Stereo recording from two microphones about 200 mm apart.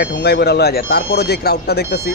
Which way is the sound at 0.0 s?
50° left (ahead or behind).